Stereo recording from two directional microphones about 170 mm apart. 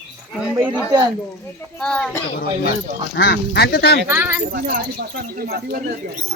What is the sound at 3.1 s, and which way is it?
Speech, 75° left (ahead or behind).